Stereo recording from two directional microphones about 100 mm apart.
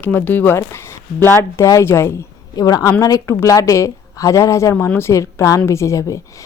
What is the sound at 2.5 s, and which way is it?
Speech, 40° left (ahead or behind).